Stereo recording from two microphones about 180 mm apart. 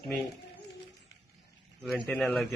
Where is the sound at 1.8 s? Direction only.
Centre (ahead or behind).